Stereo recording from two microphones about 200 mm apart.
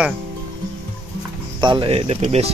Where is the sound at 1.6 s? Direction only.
25° right (ahead or behind).